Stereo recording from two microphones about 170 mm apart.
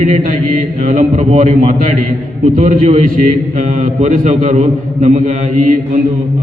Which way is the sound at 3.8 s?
45° right (ahead or behind).